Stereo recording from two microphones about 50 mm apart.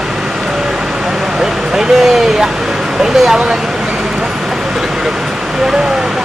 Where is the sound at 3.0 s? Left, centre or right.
Centre.